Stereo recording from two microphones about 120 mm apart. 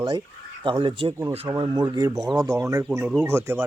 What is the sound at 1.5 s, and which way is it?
Speech, 30° right (ahead or behind).